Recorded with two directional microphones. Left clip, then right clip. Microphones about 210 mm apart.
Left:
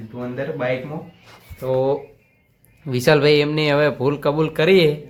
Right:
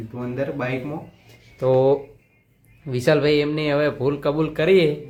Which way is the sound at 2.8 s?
15° left (ahead or behind).